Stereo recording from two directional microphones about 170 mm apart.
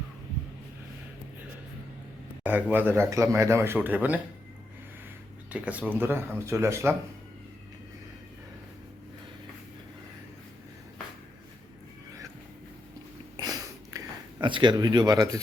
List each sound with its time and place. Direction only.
2.4 s speech: 10° right (ahead or behind)
5.5 s speech: 10° right (ahead or behind)
13.3 s a sound: 20° right (ahead or behind)